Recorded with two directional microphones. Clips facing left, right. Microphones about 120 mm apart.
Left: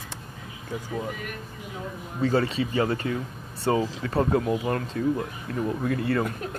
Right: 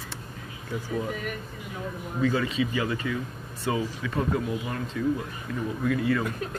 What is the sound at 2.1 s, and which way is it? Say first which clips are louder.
Speech: left 2 dB; 35° left (ahead or behind).